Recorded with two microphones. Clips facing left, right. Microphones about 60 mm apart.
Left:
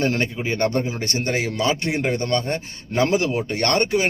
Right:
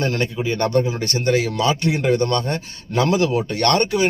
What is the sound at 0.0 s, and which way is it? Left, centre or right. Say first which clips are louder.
Speech: right 1 dB; left.